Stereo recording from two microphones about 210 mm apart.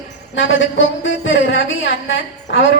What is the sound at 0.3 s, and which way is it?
A woman's voice, 60° left (ahead or behind).